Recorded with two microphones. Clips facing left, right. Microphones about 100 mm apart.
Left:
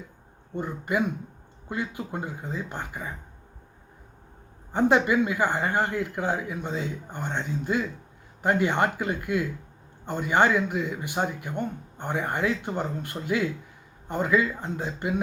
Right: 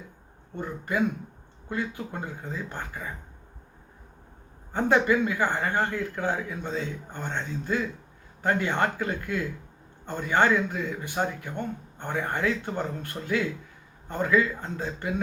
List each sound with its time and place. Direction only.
0.5 s speech: 15° left (ahead or behind)
4.7 s speech: 15° left (ahead or behind)